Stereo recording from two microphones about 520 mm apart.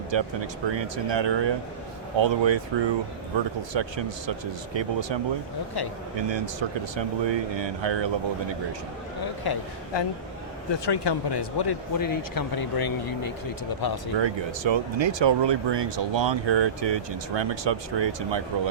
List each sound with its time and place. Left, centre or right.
0.1 s speech: right
9.2 s speech: left
14.2 s speech: right